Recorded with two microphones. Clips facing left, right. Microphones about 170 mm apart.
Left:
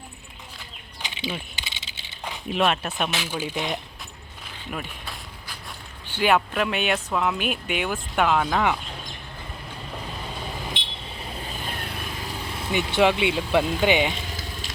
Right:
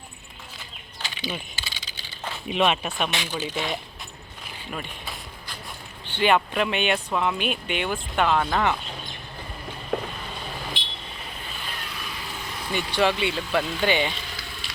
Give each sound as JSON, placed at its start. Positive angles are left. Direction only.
{"t": 1.0, "sound": "a sound", "side_deg": 25}
{"t": 1.5, "sound": "typing", "side_deg": 20}
{"t": 2.5, "sound": "speech", "side_deg": 0}
{"t": 4.7, "sound": "a sound", "side_deg": 5}
{"t": 6.1, "sound": "speech", "side_deg": 5}
{"t": 9.9, "sound": "vehicle", "side_deg": -70}
{"t": 11.7, "sound": "vehicle", "side_deg": 50}
{"t": 12.5, "sound": "speech", "side_deg": 20}
{"t": 14.3, "sound": "a sound", "side_deg": 40}